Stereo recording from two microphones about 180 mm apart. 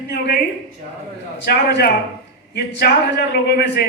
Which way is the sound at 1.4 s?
60° left (ahead or behind).